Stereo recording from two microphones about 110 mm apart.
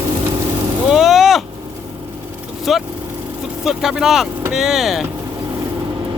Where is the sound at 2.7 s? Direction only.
Centre (ahead or behind).